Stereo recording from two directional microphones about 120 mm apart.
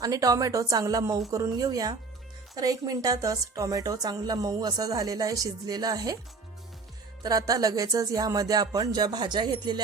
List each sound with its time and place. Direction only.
0.0 s a woman's voice: 30° right (ahead or behind)
7.2 s a woman's voice: 30° right (ahead or behind)